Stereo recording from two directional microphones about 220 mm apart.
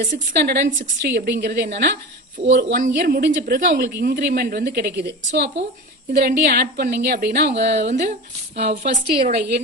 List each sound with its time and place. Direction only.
0.0 s a woman's voice: 40° right (ahead or behind)
8.7 s a woman's voice: 30° right (ahead or behind)
9.2 s a woman's voice: 45° right (ahead or behind)